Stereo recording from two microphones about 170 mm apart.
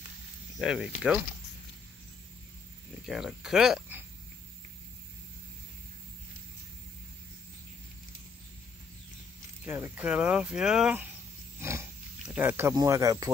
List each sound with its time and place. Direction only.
0.6 s speech: 5° right (ahead or behind)
3.1 s speech: 5° right (ahead or behind)
9.7 s speech: 10° right (ahead or behind)
11.6 s wild animals: 15° right (ahead or behind)
12.3 s speech: 10° right (ahead or behind)